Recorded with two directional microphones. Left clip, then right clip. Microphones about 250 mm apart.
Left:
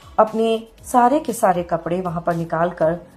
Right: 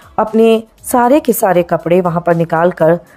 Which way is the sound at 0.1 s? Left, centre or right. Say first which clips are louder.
Right 6 dB; right.